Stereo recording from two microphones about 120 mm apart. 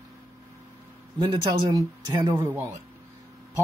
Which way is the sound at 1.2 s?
35° right (ahead or behind).